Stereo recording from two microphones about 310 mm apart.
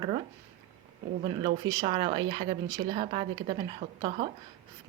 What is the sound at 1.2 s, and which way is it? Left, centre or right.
Speech, centre.